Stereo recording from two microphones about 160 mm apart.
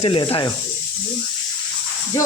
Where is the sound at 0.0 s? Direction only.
35° left (ahead or behind).